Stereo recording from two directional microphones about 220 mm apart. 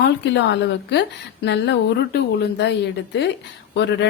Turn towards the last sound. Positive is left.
turn(degrees=55)  # may be behind; listen again after turning